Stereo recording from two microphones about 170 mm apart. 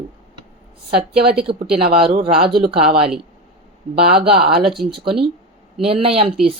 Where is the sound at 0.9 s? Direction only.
70° right (ahead or behind).